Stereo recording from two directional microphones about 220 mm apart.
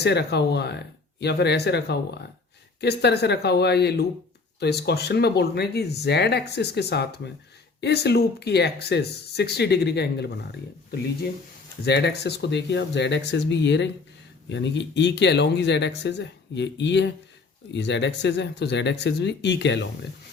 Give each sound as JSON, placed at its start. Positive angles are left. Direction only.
{"t": 0.0, "sound": "speech", "side_deg": 50}
{"t": 11.9, "sound": "speech", "side_deg": 50}